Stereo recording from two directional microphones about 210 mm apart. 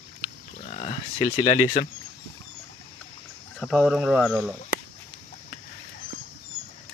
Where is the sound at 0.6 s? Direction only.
30° left (ahead or behind).